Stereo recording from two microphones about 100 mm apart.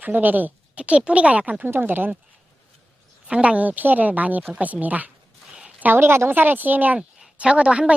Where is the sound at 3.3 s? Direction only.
10° right (ahead or behind).